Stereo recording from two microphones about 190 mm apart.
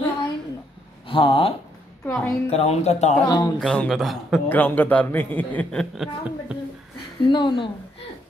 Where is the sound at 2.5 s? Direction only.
35° left (ahead or behind).